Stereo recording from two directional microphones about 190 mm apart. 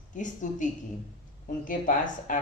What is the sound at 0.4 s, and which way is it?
Speech, 40° left (ahead or behind).